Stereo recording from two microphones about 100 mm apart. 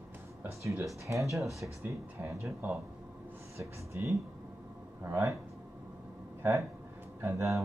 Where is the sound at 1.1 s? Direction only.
25° right (ahead or behind).